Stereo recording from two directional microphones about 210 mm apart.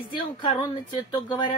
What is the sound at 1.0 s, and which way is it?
Speech, 20° left (ahead or behind).